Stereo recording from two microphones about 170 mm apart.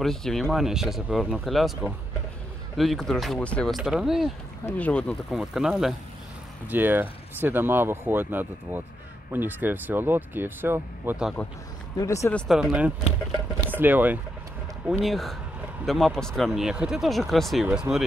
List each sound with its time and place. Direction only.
0.0 s speech: centre (ahead or behind)
4.6 s speech: 10° left (ahead or behind); by 11.3 s 10° right (ahead or behind)
12.0 s speech: 15° left (ahead or behind)
12.4 s speech: centre (ahead or behind)